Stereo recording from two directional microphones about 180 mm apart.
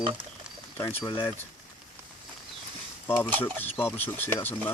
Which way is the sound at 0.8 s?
15° left (ahead or behind).